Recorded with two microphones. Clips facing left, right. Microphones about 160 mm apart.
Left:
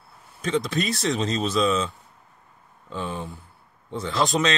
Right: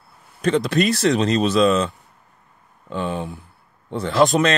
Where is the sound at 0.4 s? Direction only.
65° right (ahead or behind).